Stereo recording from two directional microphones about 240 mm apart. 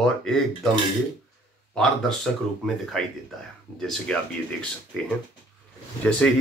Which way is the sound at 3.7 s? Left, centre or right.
Centre.